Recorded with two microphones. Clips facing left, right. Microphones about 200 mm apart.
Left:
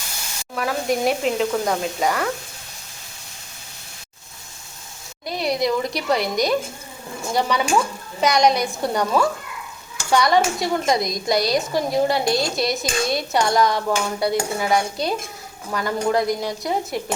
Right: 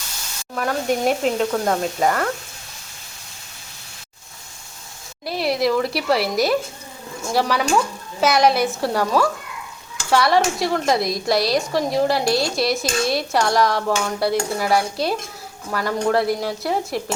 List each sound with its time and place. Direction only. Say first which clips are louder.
0.5 s a woman's voice: right 1 dB; centre (ahead or behind)
5.2 s a woman's voice: right 2 dB; 5° right (ahead or behind)